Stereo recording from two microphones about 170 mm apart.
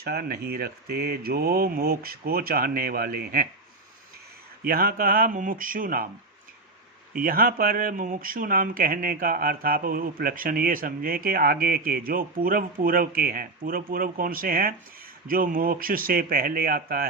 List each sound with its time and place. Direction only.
0.0 s speech: 65° right (ahead or behind)
4.6 s speech: 60° right (ahead or behind)
7.1 s speech: 60° right (ahead or behind)